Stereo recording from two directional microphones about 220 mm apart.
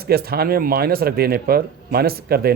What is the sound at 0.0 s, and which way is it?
A man's voice, 45° right (ahead or behind).